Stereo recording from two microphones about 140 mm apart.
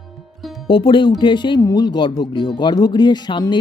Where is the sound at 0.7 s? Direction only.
35° left (ahead or behind).